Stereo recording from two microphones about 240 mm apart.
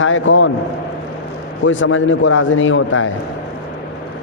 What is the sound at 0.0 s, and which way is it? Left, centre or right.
Speech, left.